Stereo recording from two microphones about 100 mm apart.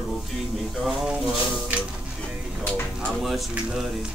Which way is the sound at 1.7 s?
15° right (ahead or behind).